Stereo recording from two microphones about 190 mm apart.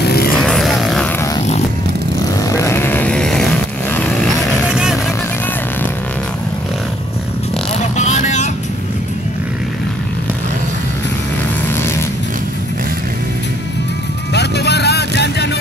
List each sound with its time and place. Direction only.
0.0 s vehicle: 55° left (ahead or behind)
0.4 s vehicle: centre (ahead or behind)
2.4 s a sound: 15° left (ahead or behind)
4.6 s vehicle: 5° right (ahead or behind)
8.0 s vehicle: 40° left (ahead or behind)
14.3 s vehicle: 60° left (ahead or behind)